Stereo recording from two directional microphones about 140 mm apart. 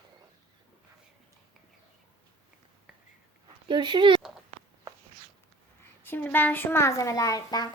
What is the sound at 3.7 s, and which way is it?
Speech, 35° right (ahead or behind).